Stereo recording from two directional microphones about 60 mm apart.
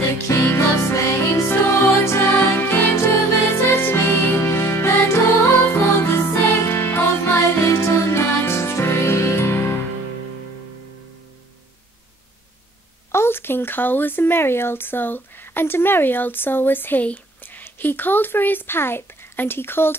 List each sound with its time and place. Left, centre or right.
0.3 s music: left
2.0 s music: left
13.1 s speech: left